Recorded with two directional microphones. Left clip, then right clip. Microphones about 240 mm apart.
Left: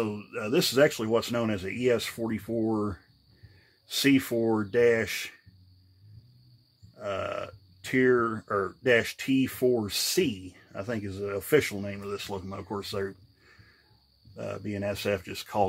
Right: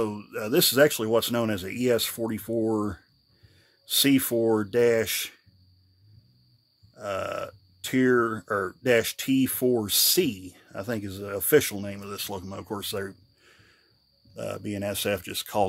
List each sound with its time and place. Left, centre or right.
0.0 s speech: right
7.0 s speech: right
14.3 s speech: right